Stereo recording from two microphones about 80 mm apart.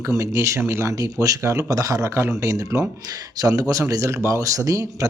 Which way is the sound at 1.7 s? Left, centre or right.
Right.